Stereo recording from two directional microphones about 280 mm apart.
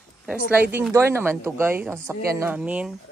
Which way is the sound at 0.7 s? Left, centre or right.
Centre.